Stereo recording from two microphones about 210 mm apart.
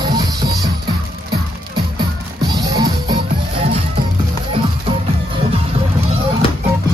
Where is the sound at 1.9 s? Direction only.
20° right (ahead or behind).